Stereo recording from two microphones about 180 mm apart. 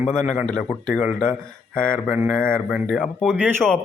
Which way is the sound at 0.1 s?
5° left (ahead or behind).